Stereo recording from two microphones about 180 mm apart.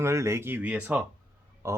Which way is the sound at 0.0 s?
15° right (ahead or behind).